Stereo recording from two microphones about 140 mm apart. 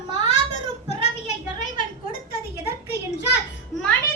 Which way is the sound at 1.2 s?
65° left (ahead or behind).